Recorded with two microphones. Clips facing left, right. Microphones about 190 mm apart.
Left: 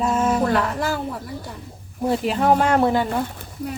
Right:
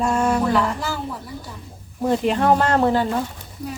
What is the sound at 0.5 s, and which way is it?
Speech, 60° left (ahead or behind).